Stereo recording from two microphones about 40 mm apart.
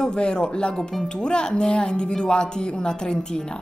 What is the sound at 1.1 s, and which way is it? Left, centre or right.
Speech, left.